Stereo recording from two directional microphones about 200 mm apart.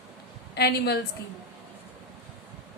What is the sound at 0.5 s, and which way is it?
Speech, 55° left (ahead or behind).